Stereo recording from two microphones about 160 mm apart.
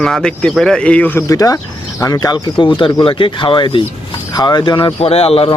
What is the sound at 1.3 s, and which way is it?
Speech, 20° left (ahead or behind).